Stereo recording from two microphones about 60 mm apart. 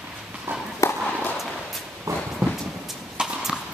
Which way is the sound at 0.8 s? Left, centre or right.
Left.